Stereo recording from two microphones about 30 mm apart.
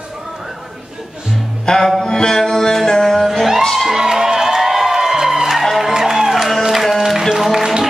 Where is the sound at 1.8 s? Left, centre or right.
Centre.